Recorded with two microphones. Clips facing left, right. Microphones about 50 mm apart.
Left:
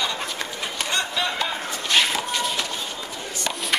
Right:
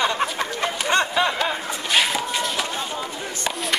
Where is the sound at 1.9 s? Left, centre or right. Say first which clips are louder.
Right 1 dB; centre.